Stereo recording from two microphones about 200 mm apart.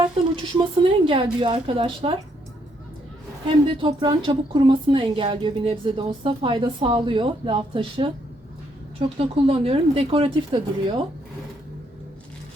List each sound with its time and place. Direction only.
0.0 s a sound: 25° right (ahead or behind)
1.0 s a woman's voice: 25° right (ahead or behind)
3.4 s a woman's voice: 25° right (ahead or behind)
9.1 s a woman's voice: 30° right (ahead or behind)